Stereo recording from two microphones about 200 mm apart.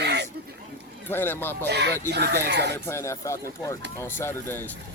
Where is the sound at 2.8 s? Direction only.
15° left (ahead or behind).